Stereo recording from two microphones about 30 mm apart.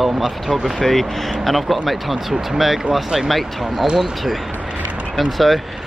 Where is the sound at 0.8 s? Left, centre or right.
Centre.